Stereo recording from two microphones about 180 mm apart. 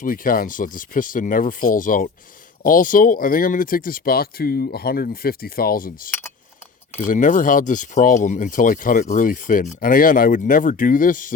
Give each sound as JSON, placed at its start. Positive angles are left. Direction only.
{"t": 0.0, "sound": "speech", "side_deg": 50}
{"t": 6.1, "sound": "speech", "side_deg": 10}
{"t": 7.0, "sound": "speech", "side_deg": 45}